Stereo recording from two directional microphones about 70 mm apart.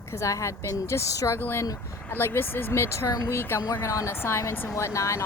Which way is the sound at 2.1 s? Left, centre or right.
Left.